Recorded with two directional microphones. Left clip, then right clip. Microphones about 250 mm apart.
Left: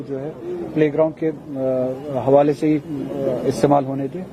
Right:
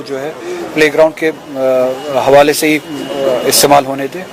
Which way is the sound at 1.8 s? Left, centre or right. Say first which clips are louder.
Right 10 dB; right.